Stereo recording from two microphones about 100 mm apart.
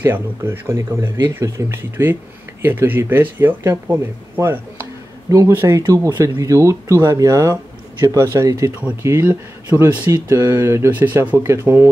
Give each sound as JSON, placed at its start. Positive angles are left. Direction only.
{"t": 0.0, "sound": "speech", "side_deg": -25}
{"t": 10.0, "sound": "speech", "side_deg": -30}